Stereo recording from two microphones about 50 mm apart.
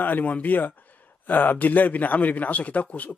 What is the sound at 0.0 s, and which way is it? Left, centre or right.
A man's voice, left.